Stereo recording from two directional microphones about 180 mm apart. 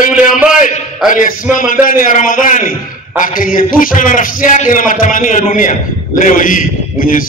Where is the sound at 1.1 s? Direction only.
45° left (ahead or behind).